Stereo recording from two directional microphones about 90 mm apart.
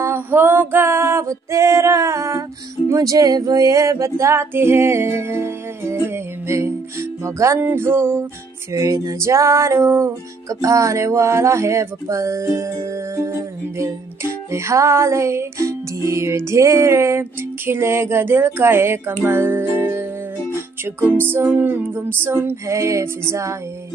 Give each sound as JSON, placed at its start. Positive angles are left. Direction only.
{"t": 0.0, "sound": "female singing", "side_deg": -25}
{"t": 2.9, "sound": "music", "side_deg": -40}
{"t": 8.7, "sound": "music", "side_deg": -40}
{"t": 14.5, "sound": "music", "side_deg": -35}